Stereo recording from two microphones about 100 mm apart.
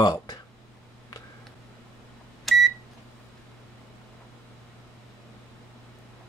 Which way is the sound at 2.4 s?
Centre (ahead or behind).